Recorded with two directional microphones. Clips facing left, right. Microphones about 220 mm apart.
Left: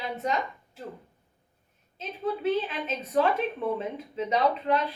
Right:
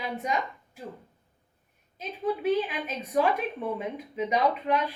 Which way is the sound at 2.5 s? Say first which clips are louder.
Even; 15° right (ahead or behind).